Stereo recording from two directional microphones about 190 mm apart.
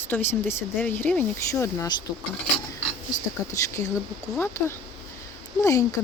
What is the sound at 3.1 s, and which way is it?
Speech, 15° left (ahead or behind).